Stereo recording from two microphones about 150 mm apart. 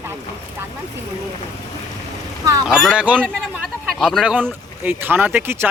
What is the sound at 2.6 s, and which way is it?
Speech, centre (ahead or behind).